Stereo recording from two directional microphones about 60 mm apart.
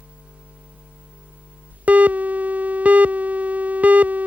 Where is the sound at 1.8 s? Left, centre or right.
Right.